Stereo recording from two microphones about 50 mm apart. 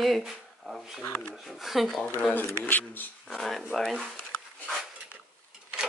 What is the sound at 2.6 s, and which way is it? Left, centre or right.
Speech, left.